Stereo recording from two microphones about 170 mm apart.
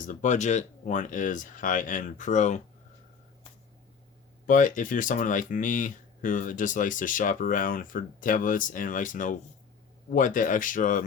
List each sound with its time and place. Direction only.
0.0 s speech: 50° left (ahead or behind)
4.4 s speech: 50° left (ahead or behind)